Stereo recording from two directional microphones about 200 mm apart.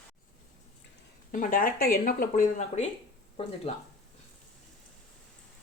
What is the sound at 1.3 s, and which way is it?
Speech, 45° left (ahead or behind).